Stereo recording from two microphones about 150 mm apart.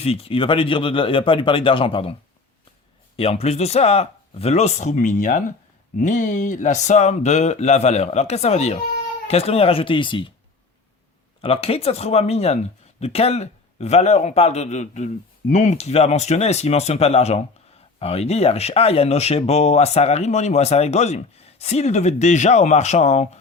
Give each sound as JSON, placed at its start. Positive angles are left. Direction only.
{"t": 0.0, "sound": "speech", "side_deg": 40}
{"t": 3.2, "sound": "speech", "side_deg": 40}
{"t": 11.3, "sound": "speech", "side_deg": 40}